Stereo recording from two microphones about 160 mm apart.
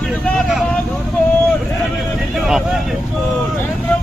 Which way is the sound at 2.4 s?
Centre (ahead or behind).